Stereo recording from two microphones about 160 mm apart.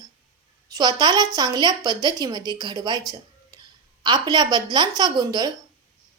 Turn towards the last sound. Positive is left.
turn(degrees=-25)  # may be behind; listen again after turning